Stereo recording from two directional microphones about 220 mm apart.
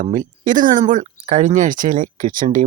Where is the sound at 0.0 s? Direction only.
35° right (ahead or behind).